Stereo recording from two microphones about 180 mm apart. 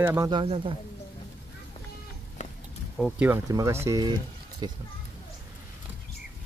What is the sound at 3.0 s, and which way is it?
Speech, 5° right (ahead or behind).